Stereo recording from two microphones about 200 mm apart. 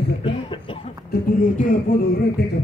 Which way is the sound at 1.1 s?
45° left (ahead or behind).